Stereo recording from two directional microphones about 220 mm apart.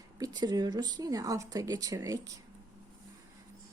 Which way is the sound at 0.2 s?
15° right (ahead or behind).